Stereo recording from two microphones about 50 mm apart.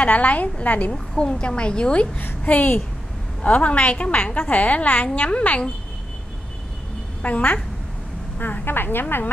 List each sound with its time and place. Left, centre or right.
0.0 s a woman's voice: left
0.9 s a woman's voice: centre
2.1 s a woman's voice: left
7.2 s a woman's voice: left
8.4 s a woman's voice: left